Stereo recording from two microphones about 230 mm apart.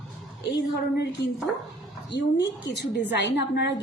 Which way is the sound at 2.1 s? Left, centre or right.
Left.